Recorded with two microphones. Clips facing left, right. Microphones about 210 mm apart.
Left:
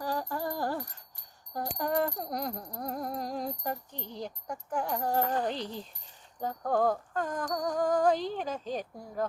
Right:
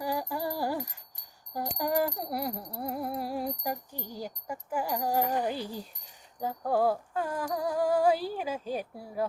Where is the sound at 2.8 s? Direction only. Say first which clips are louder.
Right 2 dB; 5° right (ahead or behind).